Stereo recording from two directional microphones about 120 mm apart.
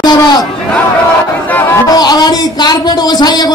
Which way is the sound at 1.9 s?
35° left (ahead or behind).